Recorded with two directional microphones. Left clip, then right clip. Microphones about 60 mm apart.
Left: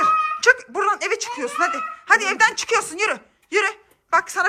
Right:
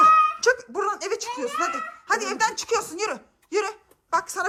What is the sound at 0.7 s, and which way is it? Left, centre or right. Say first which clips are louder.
A woman's voice: left 5 dB; right.